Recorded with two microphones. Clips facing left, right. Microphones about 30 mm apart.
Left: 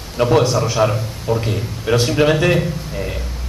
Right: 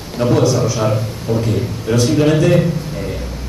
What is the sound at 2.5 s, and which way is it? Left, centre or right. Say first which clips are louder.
Speech: right 4 dB; centre.